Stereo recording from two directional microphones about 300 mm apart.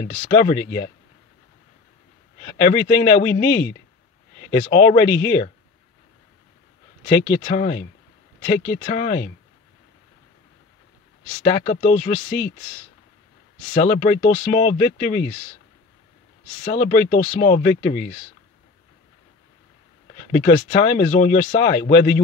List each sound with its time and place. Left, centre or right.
0.0 s speech: left
2.6 s speech: left
7.2 s speech: left
11.4 s speech: centre
13.7 s speech: left
16.6 s speech: left
20.2 s speech: left